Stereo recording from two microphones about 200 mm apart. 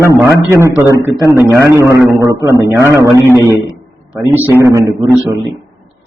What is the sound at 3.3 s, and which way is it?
A man's voice, 15° right (ahead or behind).